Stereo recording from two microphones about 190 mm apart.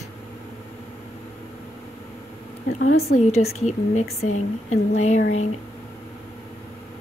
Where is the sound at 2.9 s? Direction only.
35° left (ahead or behind).